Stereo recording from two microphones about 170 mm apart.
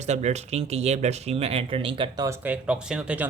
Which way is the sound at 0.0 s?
40° right (ahead or behind).